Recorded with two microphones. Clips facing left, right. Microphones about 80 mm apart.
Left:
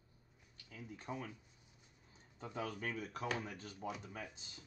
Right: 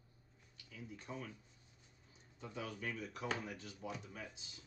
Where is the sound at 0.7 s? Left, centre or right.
Left.